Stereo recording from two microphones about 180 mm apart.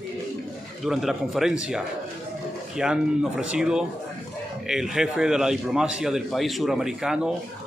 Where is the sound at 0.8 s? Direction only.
Centre (ahead or behind).